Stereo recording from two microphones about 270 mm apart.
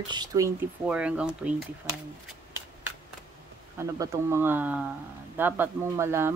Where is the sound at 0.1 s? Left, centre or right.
Centre.